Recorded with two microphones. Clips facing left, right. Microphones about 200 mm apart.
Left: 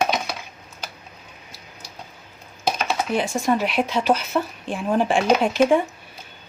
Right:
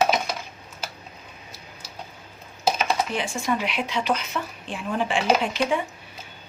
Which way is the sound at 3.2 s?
40° left (ahead or behind).